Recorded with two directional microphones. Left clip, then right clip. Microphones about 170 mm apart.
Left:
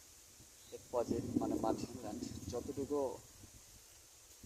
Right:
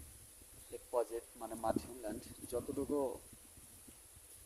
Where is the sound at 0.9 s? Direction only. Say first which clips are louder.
Left 1 dB; 15° right (ahead or behind).